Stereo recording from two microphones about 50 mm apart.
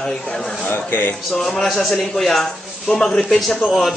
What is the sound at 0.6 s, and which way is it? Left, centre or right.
Speech, left.